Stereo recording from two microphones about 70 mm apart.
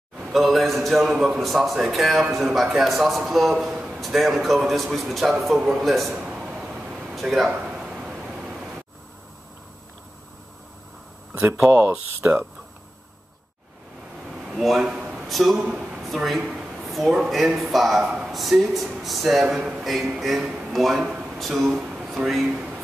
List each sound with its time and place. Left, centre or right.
0.3 s a man's voice: centre
6.1 s a sound: centre
7.5 s a sound: centre
11.7 s speech: right
14.4 s speech: centre
15.6 s speech: centre
16.0 s a sound: centre
17.1 s a man's voice: centre
19.4 s a man's voice: centre